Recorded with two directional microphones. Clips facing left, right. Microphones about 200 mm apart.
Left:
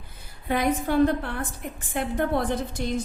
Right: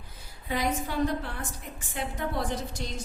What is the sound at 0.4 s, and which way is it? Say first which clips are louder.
A woman's voice: left 6 dB; 55° left (ahead or behind).